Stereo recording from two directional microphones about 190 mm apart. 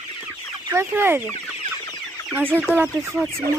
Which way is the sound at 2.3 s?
10° right (ahead or behind).